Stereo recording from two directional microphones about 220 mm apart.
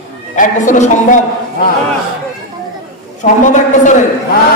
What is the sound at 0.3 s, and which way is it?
Speech, 35° left (ahead or behind).